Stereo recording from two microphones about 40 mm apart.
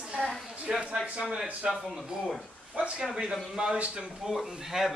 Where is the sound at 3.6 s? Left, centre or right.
Right.